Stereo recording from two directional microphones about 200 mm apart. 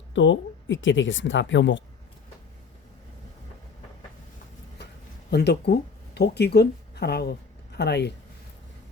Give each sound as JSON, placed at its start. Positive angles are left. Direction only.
{"t": 0.1, "sound": "speech", "side_deg": 65}
{"t": 5.3, "sound": "speech", "side_deg": 55}